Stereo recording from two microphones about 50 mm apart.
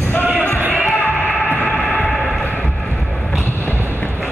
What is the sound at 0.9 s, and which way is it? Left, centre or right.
Music, left.